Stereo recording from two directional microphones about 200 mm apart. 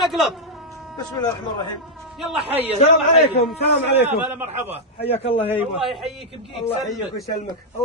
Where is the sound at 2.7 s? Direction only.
30° left (ahead or behind).